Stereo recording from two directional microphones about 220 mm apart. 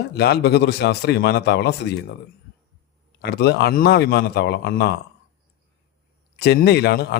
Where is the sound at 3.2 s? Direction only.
50° left (ahead or behind).